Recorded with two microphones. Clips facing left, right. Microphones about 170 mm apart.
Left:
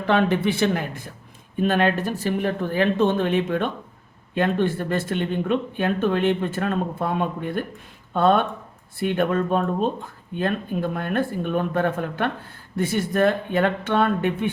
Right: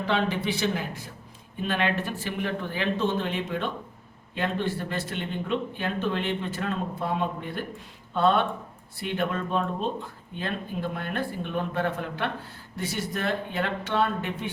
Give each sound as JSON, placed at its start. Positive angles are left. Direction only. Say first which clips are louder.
{"t": 0.1, "sound": "speech", "louder": "left 7 dB", "side_deg": 55}